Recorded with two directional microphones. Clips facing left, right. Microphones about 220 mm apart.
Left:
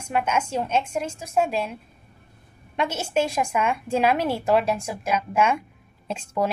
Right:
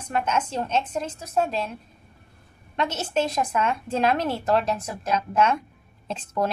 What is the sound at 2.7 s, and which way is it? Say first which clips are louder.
A woman's voice: left 1 dB; 10° left (ahead or behind).